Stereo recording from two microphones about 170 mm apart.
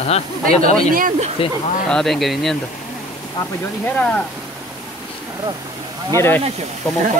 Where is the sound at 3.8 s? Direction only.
10° left (ahead or behind).